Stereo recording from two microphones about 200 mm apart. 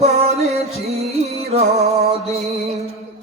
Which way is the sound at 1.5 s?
30° right (ahead or behind).